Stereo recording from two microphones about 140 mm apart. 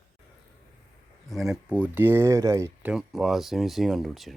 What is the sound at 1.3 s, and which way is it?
Speech, centre (ahead or behind).